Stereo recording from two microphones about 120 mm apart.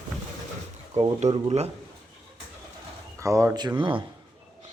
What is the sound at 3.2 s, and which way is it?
Speech, 25° right (ahead or behind).